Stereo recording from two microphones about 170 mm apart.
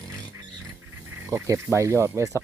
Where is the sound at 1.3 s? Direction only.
15° right (ahead or behind).